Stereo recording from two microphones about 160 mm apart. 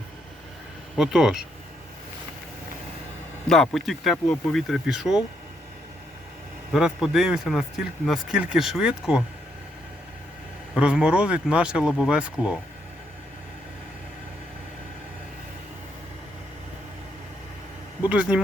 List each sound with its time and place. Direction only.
0.9 s speech: centre (ahead or behind)
3.4 s speech: 5° left (ahead or behind)
6.7 s speech: 5° right (ahead or behind)
10.8 s speech: 5° right (ahead or behind)
18.0 s speech: 10° right (ahead or behind)